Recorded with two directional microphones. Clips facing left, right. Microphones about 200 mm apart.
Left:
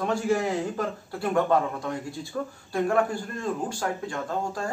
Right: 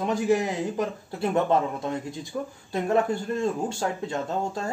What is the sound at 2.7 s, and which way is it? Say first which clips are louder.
Speech: right 1 dB; 25° right (ahead or behind).